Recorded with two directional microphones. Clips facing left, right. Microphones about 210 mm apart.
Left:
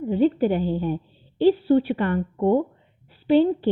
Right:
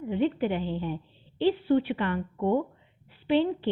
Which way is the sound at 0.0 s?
40° left (ahead or behind).